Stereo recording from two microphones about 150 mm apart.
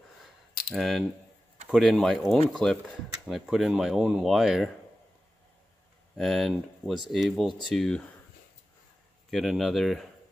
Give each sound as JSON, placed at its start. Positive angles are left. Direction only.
{"t": 0.7, "sound": "speech", "side_deg": 0}
{"t": 6.1, "sound": "speech", "side_deg": 0}
{"t": 9.3, "sound": "speech", "side_deg": 0}